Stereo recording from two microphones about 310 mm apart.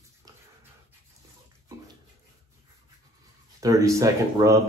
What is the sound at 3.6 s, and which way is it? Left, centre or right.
Speech, centre.